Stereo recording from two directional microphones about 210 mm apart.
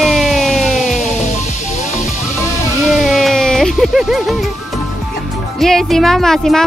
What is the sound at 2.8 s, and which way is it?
Speech, centre (ahead or behind).